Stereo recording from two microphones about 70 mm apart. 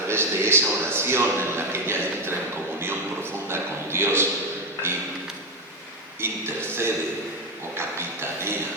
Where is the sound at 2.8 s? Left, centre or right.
Right.